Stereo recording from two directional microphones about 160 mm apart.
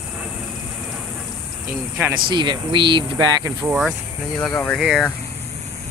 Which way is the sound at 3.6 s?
5° right (ahead or behind).